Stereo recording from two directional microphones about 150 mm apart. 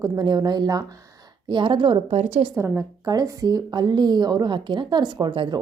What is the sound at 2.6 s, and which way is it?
A woman's voice, 20° right (ahead or behind).